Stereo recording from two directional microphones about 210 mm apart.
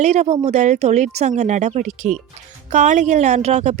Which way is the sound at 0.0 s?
35° right (ahead or behind).